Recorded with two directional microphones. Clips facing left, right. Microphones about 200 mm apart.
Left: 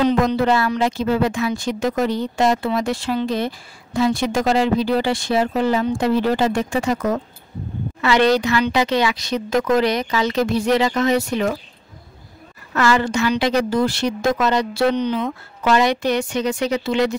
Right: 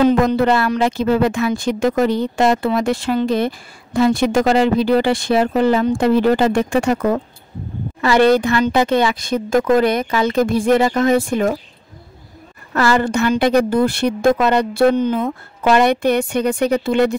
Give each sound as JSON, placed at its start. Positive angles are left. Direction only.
{"t": 0.0, "sound": "a woman's voice", "side_deg": -50}
{"t": 12.9, "sound": "a woman's voice", "side_deg": -55}